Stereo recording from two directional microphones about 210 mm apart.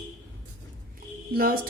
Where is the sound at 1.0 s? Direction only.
45° right (ahead or behind).